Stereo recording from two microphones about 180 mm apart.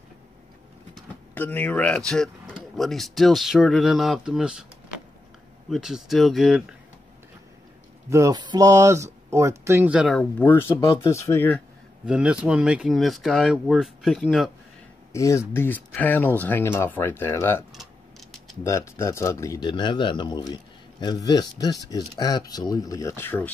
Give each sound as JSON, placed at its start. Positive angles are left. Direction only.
{"t": 1.3, "sound": "speech", "side_deg": 10}
{"t": 5.7, "sound": "speech", "side_deg": 0}
{"t": 8.1, "sound": "speech", "side_deg": -20}
{"t": 10.1, "sound": "speech", "side_deg": 10}
{"t": 12.1, "sound": "speech", "side_deg": -5}
{"t": 15.1, "sound": "speech", "side_deg": 15}